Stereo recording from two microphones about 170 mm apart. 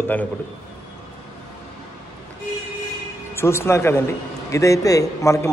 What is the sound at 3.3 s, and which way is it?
A man's voice, 15° left (ahead or behind).